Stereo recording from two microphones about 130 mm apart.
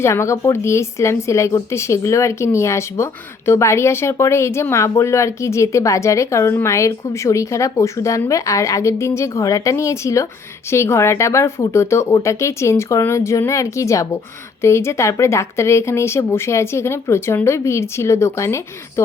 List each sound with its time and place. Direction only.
0.0 s speech: 20° left (ahead or behind)